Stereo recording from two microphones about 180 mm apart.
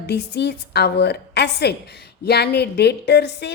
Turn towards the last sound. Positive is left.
turn(degrees=65)  # may be behind; listen again after turning